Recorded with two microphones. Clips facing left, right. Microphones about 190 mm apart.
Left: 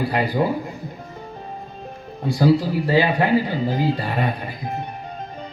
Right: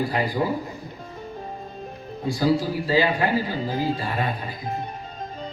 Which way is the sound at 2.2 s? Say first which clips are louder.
Left 4 dB; 65° left (ahead or behind).